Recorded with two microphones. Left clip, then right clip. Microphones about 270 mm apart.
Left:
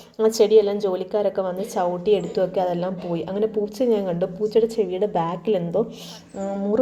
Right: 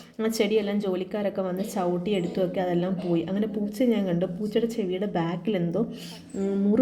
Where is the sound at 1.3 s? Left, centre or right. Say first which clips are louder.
Left 5 dB; left.